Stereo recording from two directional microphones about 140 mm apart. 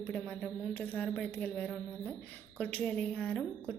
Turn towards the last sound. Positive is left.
turn(degrees=5)  # may be behind; listen again after turning